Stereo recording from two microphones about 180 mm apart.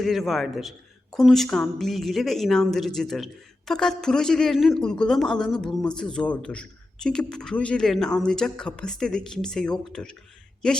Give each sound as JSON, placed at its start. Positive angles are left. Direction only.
{"t": 0.0, "sound": "a woman's voice", "side_deg": 0}